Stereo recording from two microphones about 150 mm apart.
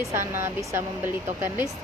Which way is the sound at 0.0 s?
20° right (ahead or behind).